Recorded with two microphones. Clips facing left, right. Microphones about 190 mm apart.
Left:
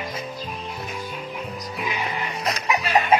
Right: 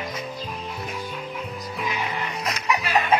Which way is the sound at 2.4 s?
30° left (ahead or behind).